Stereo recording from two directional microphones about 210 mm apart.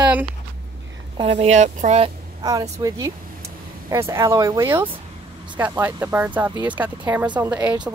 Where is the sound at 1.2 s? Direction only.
25° right (ahead or behind).